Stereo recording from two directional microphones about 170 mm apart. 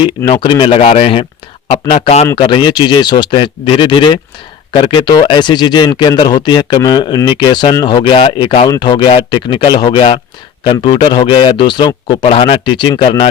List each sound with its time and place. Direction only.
0.3 s speech: 25° left (ahead or behind)